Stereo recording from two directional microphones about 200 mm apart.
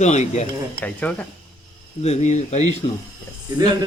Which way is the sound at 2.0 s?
35° left (ahead or behind).